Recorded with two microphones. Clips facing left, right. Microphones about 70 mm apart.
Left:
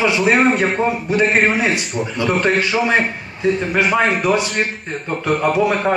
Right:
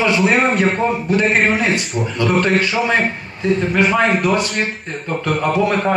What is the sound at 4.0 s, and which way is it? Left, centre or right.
Speech, centre.